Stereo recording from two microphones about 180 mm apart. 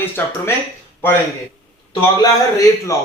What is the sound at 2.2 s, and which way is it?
Speech, 20° left (ahead or behind).